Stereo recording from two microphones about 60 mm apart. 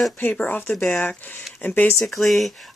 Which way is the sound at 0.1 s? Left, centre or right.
Left.